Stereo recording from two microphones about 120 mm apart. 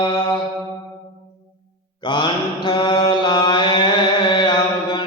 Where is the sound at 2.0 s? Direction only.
40° left (ahead or behind).